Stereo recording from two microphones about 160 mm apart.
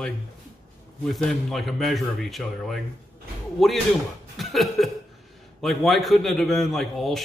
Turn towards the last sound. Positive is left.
turn(degrees=0)  # may be behind; listen again after turning